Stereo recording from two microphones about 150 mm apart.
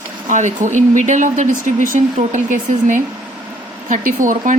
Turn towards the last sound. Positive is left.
turn(degrees=-60)  # may be behind; listen again after turning